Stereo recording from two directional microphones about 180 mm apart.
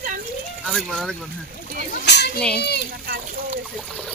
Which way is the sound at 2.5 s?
65° left (ahead or behind).